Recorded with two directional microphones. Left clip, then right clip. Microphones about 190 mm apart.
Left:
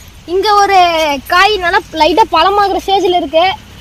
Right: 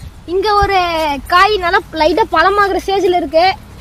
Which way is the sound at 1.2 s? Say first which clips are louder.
Right 1 dB; 35° left (ahead or behind).